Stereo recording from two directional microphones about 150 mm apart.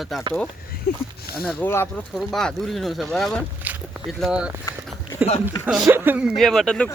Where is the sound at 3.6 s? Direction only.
10° right (ahead or behind).